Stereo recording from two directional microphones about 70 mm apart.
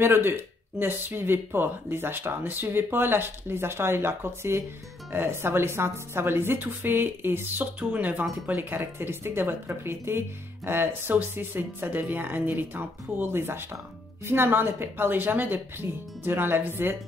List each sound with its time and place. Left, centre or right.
0.0 s a woman's voice: right